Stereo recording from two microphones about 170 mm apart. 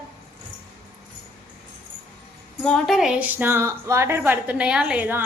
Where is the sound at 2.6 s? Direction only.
Centre (ahead or behind).